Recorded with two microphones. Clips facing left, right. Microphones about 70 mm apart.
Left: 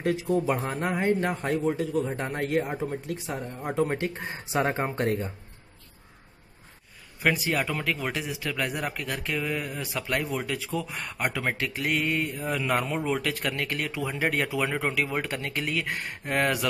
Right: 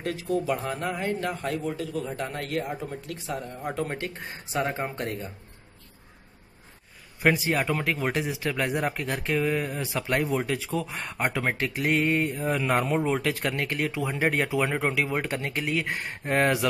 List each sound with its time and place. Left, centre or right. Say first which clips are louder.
0.0 s speech: left 3 dB; left
7.2 s speech: right 2 dB; right
7.5 s speech: right 2 dB; centre
7.8 s speech: right 3 dB; right